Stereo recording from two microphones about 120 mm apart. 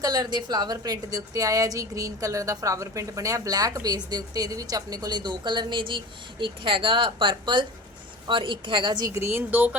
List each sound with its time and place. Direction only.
0.0 s a woman's voice: 35° right (ahead or behind); by 9.7 s 15° right (ahead or behind)